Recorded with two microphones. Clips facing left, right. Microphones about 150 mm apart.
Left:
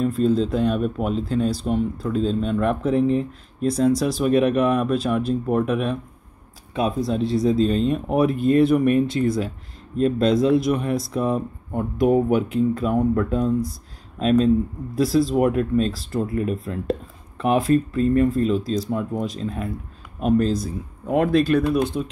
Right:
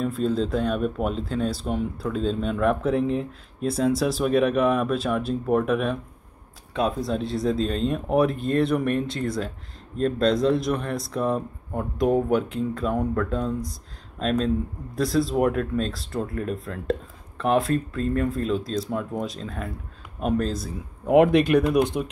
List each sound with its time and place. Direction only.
0.0 s speech: centre (ahead or behind)
21.1 s speech: 15° right (ahead or behind)